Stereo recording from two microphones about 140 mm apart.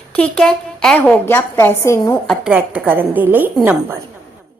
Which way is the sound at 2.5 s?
15° right (ahead or behind).